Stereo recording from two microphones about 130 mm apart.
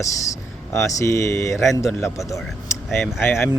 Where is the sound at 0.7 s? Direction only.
20° left (ahead or behind).